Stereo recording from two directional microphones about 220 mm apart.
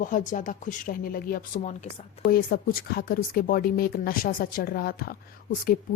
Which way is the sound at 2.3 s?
45° left (ahead or behind).